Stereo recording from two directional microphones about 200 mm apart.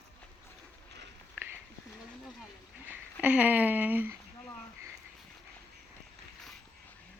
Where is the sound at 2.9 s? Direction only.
10° right (ahead or behind).